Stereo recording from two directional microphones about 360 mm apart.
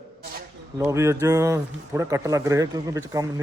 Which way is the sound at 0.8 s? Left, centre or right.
Centre.